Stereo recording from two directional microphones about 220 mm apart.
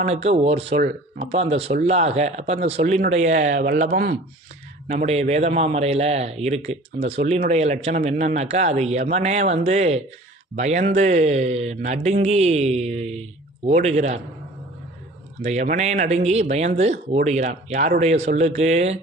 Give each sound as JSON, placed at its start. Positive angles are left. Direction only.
{"t": 0.0, "sound": "a man's voice", "side_deg": -30}
{"t": 3.9, "sound": "speech", "side_deg": -50}
{"t": 4.9, "sound": "a man's voice", "side_deg": -30}
{"t": 15.4, "sound": "speech", "side_deg": -30}